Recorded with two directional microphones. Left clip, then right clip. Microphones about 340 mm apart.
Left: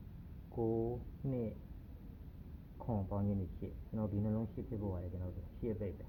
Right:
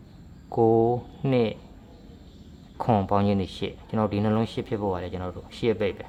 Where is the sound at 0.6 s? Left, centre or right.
Right.